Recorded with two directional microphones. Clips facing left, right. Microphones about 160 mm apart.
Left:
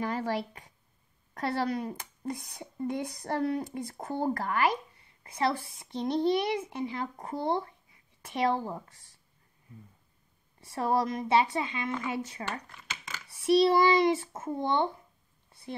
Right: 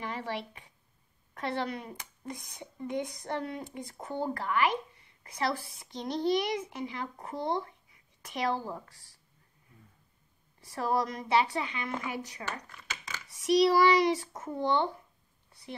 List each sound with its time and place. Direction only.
0.0 s speech: 40° left (ahead or behind)
5.2 s a child's voice: 25° left (ahead or behind)
10.6 s a child's voice: 25° left (ahead or behind)